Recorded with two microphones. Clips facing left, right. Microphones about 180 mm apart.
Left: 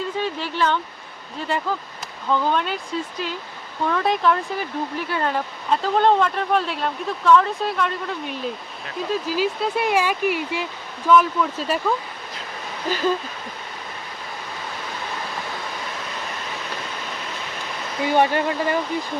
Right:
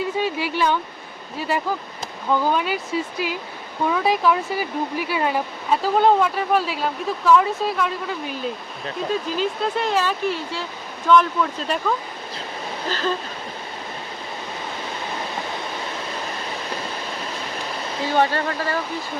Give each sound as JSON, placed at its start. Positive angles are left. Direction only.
{"t": 0.2, "sound": "speech", "side_deg": -10}
{"t": 18.0, "sound": "speech", "side_deg": 15}